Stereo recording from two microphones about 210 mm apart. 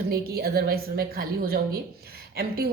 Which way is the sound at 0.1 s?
45° right (ahead or behind).